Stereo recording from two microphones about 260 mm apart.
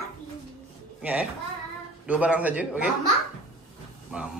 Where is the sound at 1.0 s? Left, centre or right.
Centre.